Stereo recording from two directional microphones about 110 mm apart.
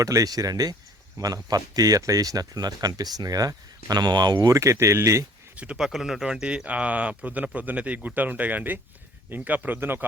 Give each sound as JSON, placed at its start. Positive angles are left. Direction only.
{"t": 0.0, "sound": "speech", "side_deg": -30}
{"t": 5.5, "sound": "speech", "side_deg": -10}